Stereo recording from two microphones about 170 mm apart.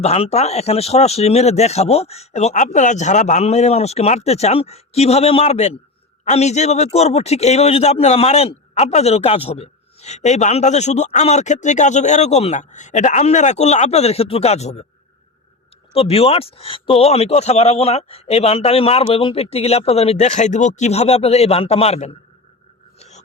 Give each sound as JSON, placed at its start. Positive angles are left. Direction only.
{"t": 0.0, "sound": "a man's voice", "side_deg": 40}
{"t": 15.9, "sound": "a man's voice", "side_deg": 35}
{"t": 23.0, "sound": "a sound", "side_deg": 40}